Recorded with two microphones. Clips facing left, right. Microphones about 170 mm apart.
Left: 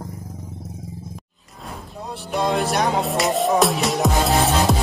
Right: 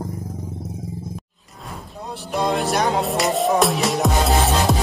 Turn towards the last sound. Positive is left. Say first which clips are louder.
# even
turn(degrees=0)  # may be behind; listen again after turning